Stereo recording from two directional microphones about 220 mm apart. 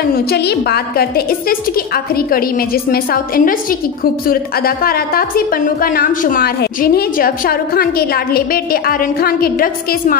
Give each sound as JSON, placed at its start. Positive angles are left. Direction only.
{"t": 0.1, "sound": "a woman's voice", "side_deg": 45}